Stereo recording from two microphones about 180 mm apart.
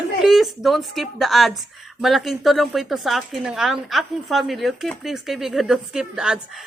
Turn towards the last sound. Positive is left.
turn(degrees=-5)  # may be behind; listen again after turning